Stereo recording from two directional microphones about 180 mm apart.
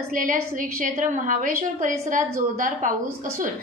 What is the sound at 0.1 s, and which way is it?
A woman's voice, 50° right (ahead or behind).